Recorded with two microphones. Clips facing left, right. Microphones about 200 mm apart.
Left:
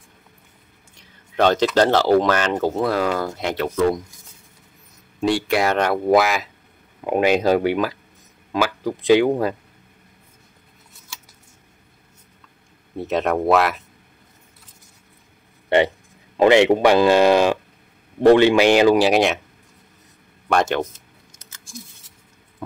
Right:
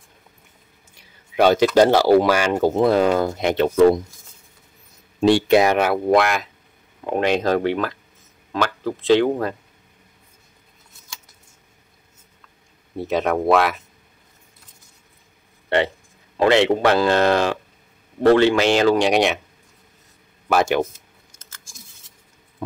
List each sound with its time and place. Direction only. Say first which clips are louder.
0.9 s speech: right 2 dB; 10° right (ahead or behind); by 4.0 s 30° right (ahead or behind)
5.2 s speech: right 5 dB; 25° right (ahead or behind)
5.8 s speech: even; centre (ahead or behind)
12.9 s speech: even; centre (ahead or behind)
16.3 s speech: left 3 dB; 15° left (ahead or behind)
18.9 s speech: left 1 dB; centre (ahead or behind)
20.4 s speech: right 1 dB; 5° right (ahead or behind)